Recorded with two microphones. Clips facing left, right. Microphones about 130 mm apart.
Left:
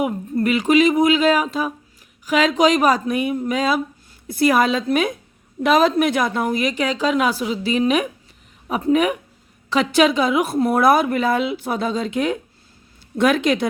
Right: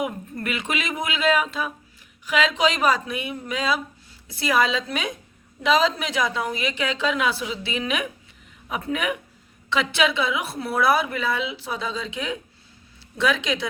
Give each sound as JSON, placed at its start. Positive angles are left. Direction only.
{"t": 0.0, "sound": "a woman's voice", "side_deg": 35}